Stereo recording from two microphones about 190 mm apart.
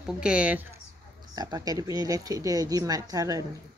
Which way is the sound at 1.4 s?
20° right (ahead or behind).